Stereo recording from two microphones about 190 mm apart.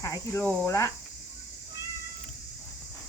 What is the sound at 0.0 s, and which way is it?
Speech, 15° left (ahead or behind).